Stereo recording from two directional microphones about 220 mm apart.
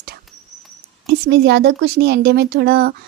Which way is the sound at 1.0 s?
50° right (ahead or behind).